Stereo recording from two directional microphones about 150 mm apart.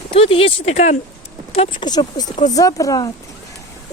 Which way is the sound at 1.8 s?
30° left (ahead or behind).